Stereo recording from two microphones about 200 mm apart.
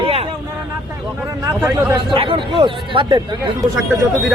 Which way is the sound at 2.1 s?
25° right (ahead or behind).